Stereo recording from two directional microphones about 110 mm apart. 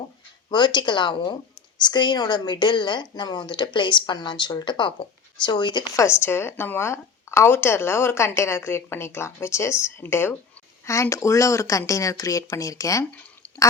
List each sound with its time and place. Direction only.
0.5 s a woman's voice: 40° left (ahead or behind)
6.0 s a woman's voice: 20° left (ahead or behind)